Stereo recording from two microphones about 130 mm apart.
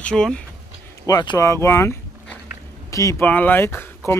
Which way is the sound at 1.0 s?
30° left (ahead or behind).